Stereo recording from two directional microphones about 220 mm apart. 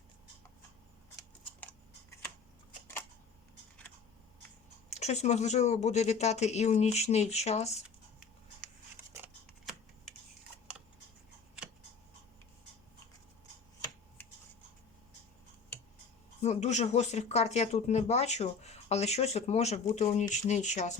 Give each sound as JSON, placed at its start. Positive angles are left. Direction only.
{"t": 4.9, "sound": "speech", "side_deg": 30}
{"t": 9.1, "sound": "scissors", "side_deg": -5}
{"t": 16.4, "sound": "speech", "side_deg": 30}